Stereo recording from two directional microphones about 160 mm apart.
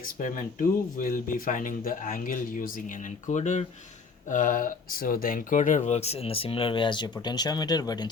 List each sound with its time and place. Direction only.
0.2 s speech: 50° left (ahead or behind); by 8.1 s 25° left (ahead or behind)